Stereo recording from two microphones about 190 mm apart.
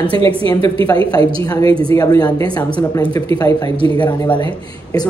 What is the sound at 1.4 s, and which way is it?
Speech, 20° left (ahead or behind).